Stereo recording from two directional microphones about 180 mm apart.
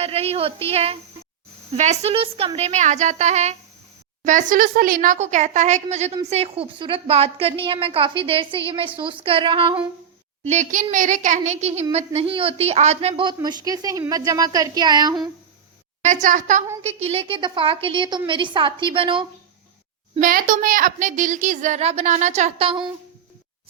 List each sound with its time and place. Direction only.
0.0 s a woman's voice: 35° right (ahead or behind)
10.4 s a woman's voice: 40° right (ahead or behind); by 15.3 s 25° right (ahead or behind)
16.0 s a woman's voice: 40° right (ahead or behind)
16.8 s a woman's voice: 35° right (ahead or behind)
20.2 s a woman's voice: 50° right (ahead or behind); by 22.9 s 30° right (ahead or behind)